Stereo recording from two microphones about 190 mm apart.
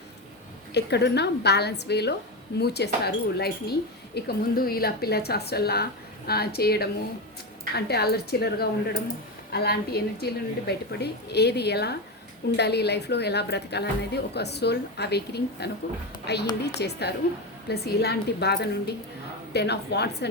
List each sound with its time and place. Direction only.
0.7 s speech: 60° left (ahead or behind)